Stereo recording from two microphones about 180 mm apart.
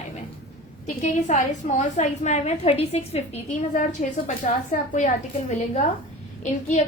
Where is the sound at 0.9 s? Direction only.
40° left (ahead or behind).